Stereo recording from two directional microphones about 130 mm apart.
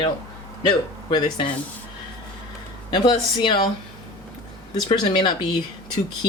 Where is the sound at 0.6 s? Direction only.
35° left (ahead or behind).